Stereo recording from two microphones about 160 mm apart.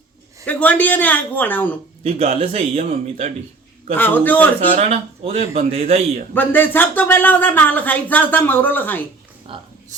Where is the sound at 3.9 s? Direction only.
10° left (ahead or behind).